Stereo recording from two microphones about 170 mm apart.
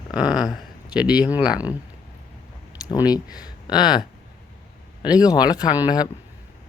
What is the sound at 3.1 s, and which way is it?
Speech, 25° left (ahead or behind).